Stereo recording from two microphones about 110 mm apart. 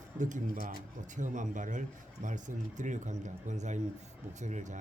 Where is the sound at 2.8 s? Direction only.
90° right.